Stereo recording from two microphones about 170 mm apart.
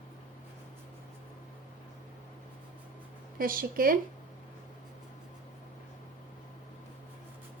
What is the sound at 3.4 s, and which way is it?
Speech, 55° right (ahead or behind).